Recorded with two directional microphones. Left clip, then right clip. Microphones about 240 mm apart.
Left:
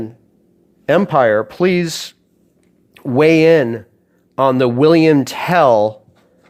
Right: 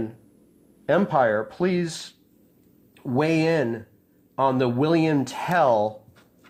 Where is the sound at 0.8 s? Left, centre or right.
Left.